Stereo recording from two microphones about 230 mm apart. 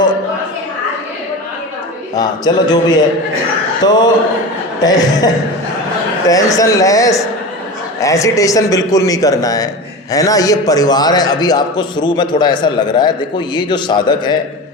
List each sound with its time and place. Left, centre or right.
2.1 s a man's voice: centre